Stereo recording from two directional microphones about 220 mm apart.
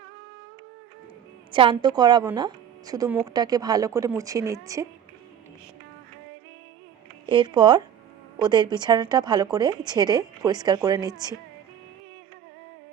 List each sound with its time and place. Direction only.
1.8 s a woman's voice: 20° right (ahead or behind)
7.3 s a woman's voice: 20° right (ahead or behind)